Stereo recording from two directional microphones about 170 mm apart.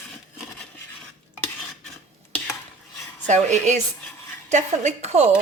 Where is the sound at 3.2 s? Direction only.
45° right (ahead or behind).